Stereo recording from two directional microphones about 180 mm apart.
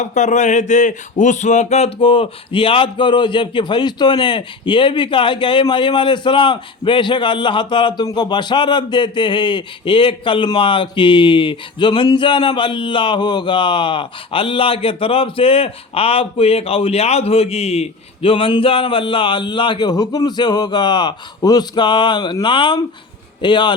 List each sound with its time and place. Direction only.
0.0 s speech: 40° left (ahead or behind); by 23.7 s 25° left (ahead or behind)